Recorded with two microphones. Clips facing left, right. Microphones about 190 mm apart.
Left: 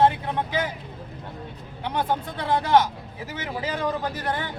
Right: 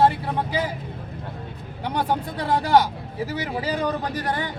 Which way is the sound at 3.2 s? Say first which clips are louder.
Right 2 dB; 35° right (ahead or behind).